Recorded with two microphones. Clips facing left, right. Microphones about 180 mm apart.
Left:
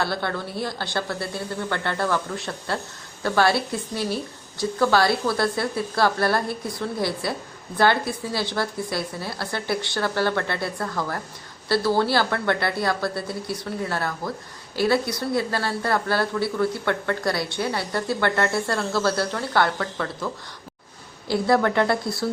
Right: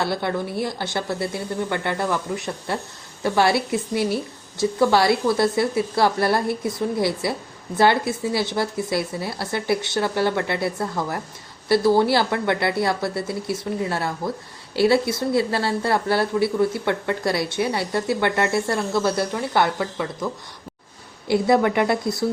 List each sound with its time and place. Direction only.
0.0 s speech: 20° right (ahead or behind)
21.2 s speech: 20° right (ahead or behind)